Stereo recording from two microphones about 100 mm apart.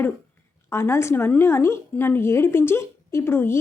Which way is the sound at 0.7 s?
25° left (ahead or behind).